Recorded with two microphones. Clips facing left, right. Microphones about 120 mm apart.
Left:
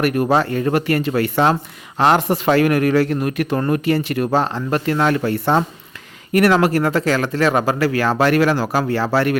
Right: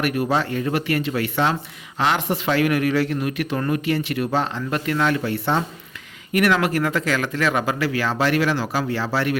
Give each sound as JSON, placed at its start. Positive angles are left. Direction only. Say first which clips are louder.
{"t": 0.0, "sound": "speech", "louder": "left 5 dB", "side_deg": 45}